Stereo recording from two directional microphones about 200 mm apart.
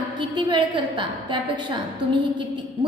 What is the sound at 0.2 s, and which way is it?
A woman's voice, 25° right (ahead or behind).